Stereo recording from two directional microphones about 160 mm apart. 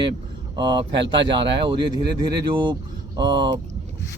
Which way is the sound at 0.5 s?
30° right (ahead or behind).